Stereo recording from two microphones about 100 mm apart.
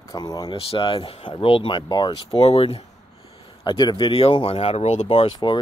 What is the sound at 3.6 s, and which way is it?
Speech, 45° left (ahead or behind).